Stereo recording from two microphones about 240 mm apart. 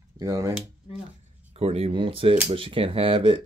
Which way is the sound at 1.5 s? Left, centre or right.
Right.